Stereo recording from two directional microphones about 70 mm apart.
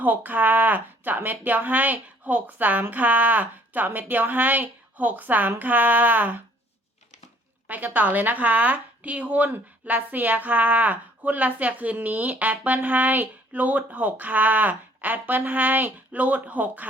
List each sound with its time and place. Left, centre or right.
0.0 s a woman's voice: right
7.7 s a woman's voice: right